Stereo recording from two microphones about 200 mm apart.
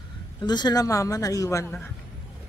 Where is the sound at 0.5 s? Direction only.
20° left (ahead or behind).